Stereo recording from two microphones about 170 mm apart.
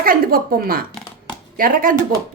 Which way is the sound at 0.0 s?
60° right (ahead or behind).